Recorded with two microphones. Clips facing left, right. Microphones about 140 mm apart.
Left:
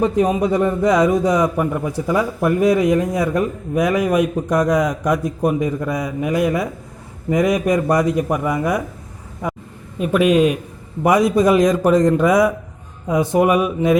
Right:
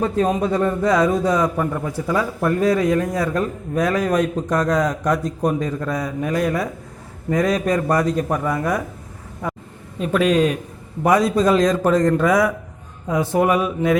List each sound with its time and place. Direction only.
0.0 s a man's voice: 15° left (ahead or behind)
9.4 s a sound: 15° left (ahead or behind)
10.0 s a man's voice: 10° left (ahead or behind)